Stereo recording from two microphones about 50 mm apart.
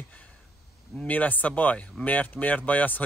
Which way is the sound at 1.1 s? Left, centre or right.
Left.